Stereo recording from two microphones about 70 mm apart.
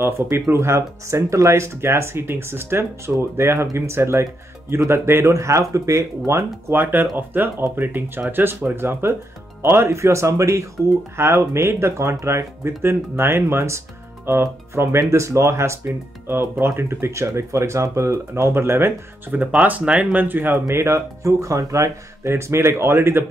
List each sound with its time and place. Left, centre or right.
0.0 s speech: right
6.7 s speech: right
19.4 s speech: right
20.6 s speech: right